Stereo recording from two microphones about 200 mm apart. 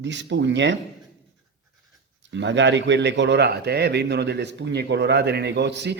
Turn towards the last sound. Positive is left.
turn(degrees=-60)  # may be behind; listen again after turning